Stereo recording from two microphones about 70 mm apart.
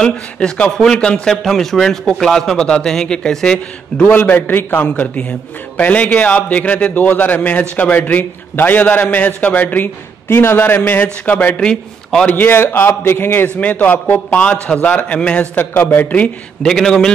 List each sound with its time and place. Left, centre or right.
0.0 s speech: centre
4.1 s a man's voice: left
11.6 s a man's voice: centre
12.3 s a man's voice: left
15.5 s a man's voice: left
16.6 s speech: centre